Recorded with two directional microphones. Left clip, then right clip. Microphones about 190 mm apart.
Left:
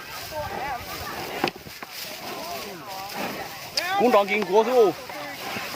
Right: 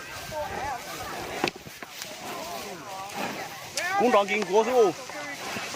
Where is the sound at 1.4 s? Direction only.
Centre (ahead or behind).